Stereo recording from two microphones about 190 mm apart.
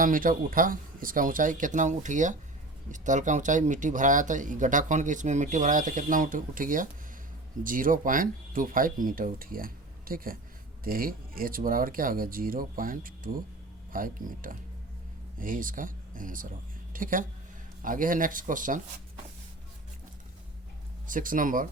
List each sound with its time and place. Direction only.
0.0 s speech: 45° right (ahead or behind)
21.1 s speech: 45° right (ahead or behind)